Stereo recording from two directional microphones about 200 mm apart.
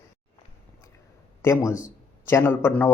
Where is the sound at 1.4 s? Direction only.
15° left (ahead or behind).